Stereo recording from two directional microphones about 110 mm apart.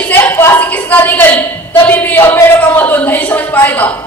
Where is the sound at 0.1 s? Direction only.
20° left (ahead or behind).